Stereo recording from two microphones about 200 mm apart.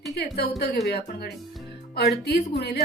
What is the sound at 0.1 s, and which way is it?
A woman's voice, 55° left (ahead or behind).